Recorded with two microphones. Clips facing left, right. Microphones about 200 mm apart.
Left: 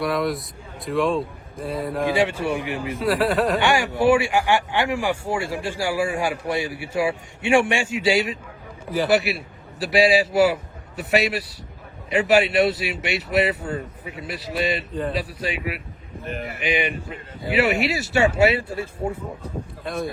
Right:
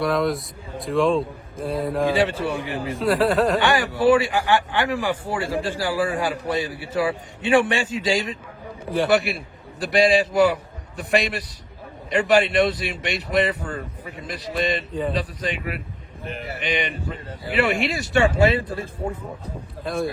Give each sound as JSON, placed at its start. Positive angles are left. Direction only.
{"t": 0.0, "sound": "a man's voice", "side_deg": 0}
{"t": 2.0, "sound": "speech", "side_deg": 15}
{"t": 3.0, "sound": "a man's voice", "side_deg": 0}
{"t": 3.6, "sound": "a man's voice", "side_deg": 15}
{"t": 19.8, "sound": "speech", "side_deg": 0}